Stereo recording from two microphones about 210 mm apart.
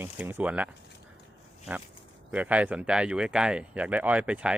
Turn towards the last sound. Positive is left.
turn(degrees=-5)  # may be behind; listen again after turning